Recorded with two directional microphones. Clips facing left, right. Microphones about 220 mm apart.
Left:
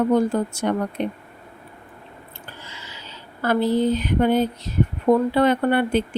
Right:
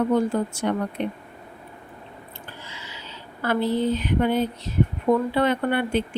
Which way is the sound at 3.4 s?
40° left (ahead or behind).